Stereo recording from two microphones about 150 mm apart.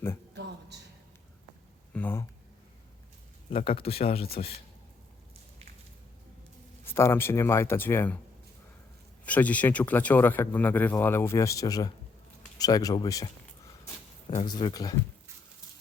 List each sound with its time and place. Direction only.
1.9 s a sound: 10° left (ahead or behind)
3.6 s speech: 40° left (ahead or behind)
6.8 s speech: 15° left (ahead or behind)
9.2 s speech: 10° left (ahead or behind); by 13.3 s 25° left (ahead or behind)
14.4 s speech: 30° left (ahead or behind)